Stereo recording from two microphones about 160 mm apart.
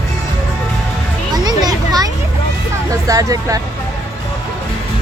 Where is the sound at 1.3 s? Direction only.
25° right (ahead or behind).